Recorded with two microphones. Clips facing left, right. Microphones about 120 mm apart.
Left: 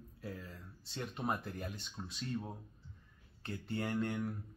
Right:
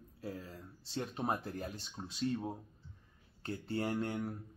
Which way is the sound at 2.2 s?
20° right (ahead or behind).